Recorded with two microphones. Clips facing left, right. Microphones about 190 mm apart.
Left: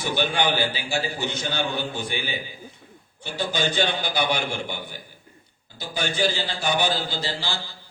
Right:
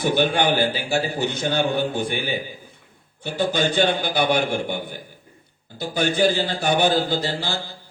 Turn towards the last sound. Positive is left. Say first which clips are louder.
# right 5 dB
turn(degrees=-55)  # may be behind; listen again after turning